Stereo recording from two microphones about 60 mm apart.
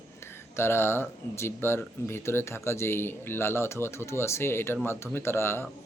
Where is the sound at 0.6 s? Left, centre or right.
Left.